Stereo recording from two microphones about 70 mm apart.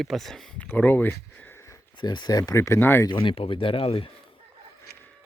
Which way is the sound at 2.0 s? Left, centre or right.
Left.